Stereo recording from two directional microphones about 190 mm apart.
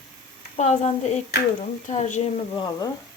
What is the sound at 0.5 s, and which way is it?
A woman's voice, 35° left (ahead or behind).